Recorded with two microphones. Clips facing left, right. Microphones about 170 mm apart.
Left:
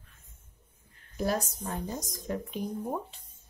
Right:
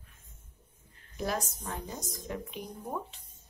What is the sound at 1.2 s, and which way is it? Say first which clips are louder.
Speech: left 4 dB; 35° left (ahead or behind).